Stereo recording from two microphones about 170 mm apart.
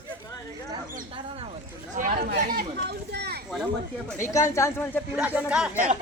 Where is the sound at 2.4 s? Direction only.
50° right (ahead or behind); by 3.4 s 70° right (ahead or behind).